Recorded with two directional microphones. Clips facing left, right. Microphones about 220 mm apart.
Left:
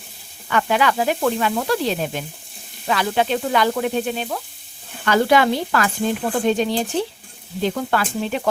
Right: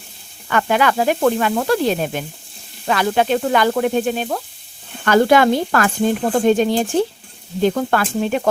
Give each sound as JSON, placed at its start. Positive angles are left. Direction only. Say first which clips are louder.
{"t": 0.5, "sound": "speech", "louder": "right 2 dB", "side_deg": -50}